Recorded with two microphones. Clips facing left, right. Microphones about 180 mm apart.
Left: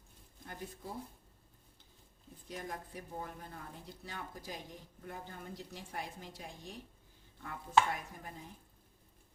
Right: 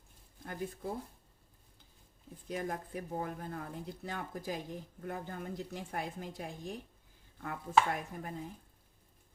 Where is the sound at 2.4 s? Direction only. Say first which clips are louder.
Right 6 dB; 55° right (ahead or behind).